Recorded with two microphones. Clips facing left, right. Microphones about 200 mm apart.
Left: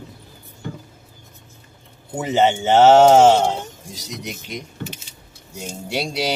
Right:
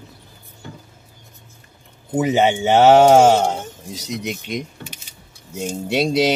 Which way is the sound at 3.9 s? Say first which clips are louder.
Right 6 dB; 20° right (ahead or behind).